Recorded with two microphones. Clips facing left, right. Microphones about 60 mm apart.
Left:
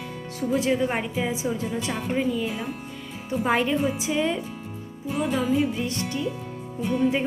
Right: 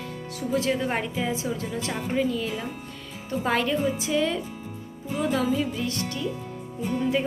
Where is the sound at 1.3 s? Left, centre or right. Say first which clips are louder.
Left 2 dB; centre.